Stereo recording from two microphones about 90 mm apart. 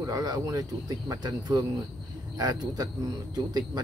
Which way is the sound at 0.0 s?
45° right (ahead or behind).